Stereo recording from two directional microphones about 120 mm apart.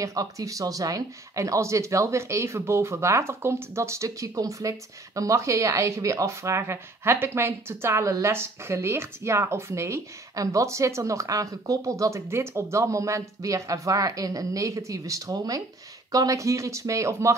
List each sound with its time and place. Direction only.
0.0 s speech: 30° right (ahead or behind)